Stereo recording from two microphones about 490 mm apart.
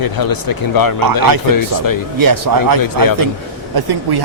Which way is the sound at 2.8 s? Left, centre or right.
Left.